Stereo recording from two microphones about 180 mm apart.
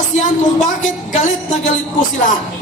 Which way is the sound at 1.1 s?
40° left (ahead or behind).